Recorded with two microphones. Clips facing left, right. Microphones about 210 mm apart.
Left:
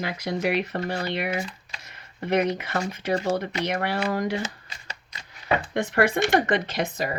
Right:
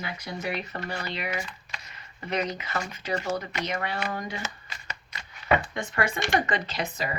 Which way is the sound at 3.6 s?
65° left (ahead or behind).